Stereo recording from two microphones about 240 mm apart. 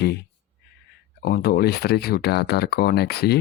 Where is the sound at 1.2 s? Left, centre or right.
Left.